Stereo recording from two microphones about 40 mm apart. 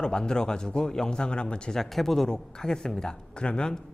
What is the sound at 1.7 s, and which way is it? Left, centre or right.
Speech, centre.